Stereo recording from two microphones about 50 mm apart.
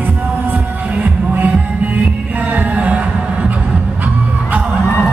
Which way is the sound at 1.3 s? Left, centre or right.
Right.